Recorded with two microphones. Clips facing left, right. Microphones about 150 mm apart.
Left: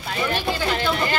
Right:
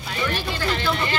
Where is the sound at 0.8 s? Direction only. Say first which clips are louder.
Left 2 dB; 40° left (ahead or behind).